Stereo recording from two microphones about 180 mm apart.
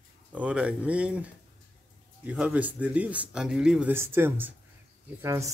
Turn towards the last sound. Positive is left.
turn(degrees=-15)  # may be behind; listen again after turning